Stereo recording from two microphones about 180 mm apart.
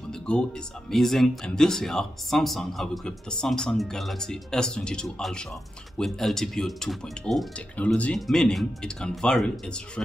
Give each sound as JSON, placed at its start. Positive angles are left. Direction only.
{"t": 0.1, "sound": "speech", "side_deg": 5}